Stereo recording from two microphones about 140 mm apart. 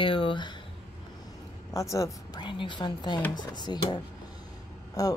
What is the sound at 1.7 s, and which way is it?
A woman's voice, 20° left (ahead or behind).